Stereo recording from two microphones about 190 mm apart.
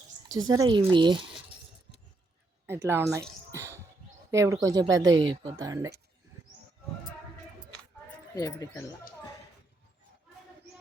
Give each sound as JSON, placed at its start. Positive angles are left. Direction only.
{"t": 0.3, "sound": "speech", "side_deg": -20}
{"t": 2.6, "sound": "speech", "side_deg": -15}
{"t": 3.5, "sound": "a sound", "side_deg": -15}
{"t": 4.3, "sound": "speech", "side_deg": -15}
{"t": 8.4, "sound": "speech", "side_deg": 20}